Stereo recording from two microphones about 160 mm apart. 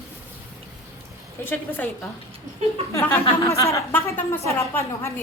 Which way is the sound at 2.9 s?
20° left (ahead or behind).